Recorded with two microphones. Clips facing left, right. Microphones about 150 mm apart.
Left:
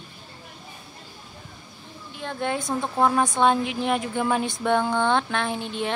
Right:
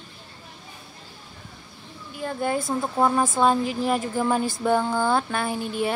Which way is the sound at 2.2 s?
5° right (ahead or behind).